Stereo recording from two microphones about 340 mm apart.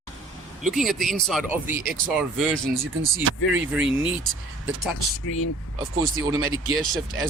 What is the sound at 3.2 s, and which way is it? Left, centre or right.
Speech, right.